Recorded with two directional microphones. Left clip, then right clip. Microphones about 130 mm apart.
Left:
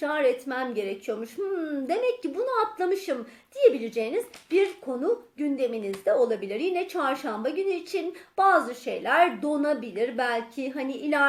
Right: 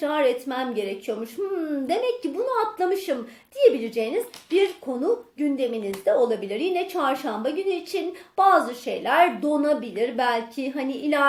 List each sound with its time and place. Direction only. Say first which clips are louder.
0.0 s speech: right 2 dB; 25° left (ahead or behind)